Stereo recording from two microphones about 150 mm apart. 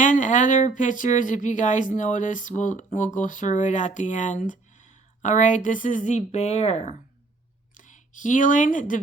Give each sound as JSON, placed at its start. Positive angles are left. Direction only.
{"t": 0.0, "sound": "speech", "side_deg": 55}